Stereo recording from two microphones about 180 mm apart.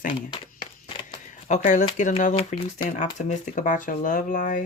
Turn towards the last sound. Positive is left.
turn(degrees=50)  # may be behind; listen again after turning